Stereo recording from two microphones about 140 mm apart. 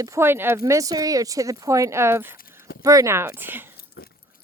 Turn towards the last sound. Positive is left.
turn(degrees=90)